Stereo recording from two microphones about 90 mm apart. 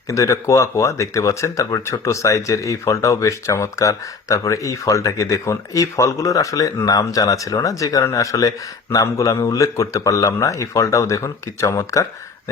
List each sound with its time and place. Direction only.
0.1 s speech: 35° left (ahead or behind)